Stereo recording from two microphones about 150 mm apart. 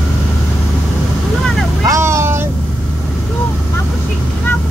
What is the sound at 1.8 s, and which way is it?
Vehicle, 20° right (ahead or behind).